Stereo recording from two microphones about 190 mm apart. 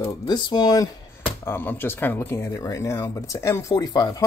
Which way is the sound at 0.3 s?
20° left (ahead or behind).